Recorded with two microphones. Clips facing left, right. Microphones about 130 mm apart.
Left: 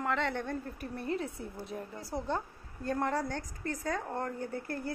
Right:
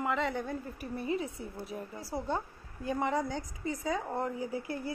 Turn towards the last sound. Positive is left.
turn(degrees=-5)  # may be behind; listen again after turning